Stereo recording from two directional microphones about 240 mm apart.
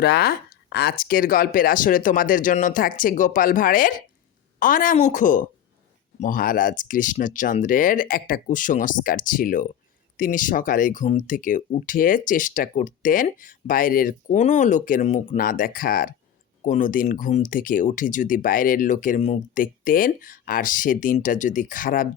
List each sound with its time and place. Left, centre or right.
0.0 s speech: left